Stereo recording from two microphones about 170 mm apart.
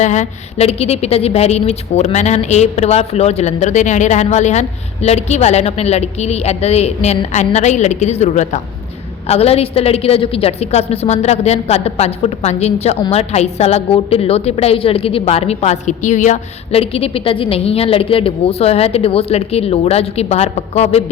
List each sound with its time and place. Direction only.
0.0 s a woman's voice: 45° left (ahead or behind)